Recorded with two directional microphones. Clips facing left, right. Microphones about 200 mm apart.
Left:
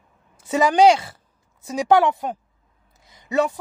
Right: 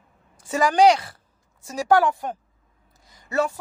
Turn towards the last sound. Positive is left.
turn(degrees=20)  # may be behind; listen again after turning